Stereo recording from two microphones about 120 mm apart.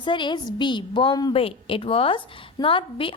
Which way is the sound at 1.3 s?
50° left (ahead or behind).